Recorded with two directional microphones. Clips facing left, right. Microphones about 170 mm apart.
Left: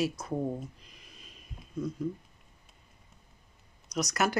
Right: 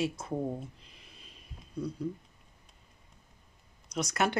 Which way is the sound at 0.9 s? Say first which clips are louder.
Left 1 dB; 30° right (ahead or behind).